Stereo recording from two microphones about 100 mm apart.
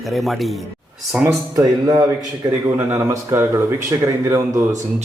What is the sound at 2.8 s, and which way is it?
Speech, 25° right (ahead or behind).